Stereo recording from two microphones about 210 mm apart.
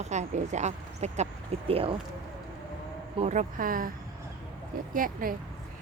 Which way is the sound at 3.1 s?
30° right (ahead or behind).